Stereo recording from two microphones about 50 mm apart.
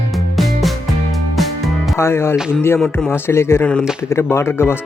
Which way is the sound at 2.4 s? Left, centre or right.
Centre.